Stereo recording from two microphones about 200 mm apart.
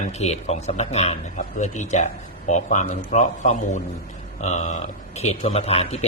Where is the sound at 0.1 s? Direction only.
35° left (ahead or behind).